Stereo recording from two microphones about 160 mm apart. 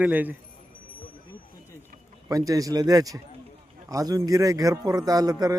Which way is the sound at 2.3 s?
20° right (ahead or behind).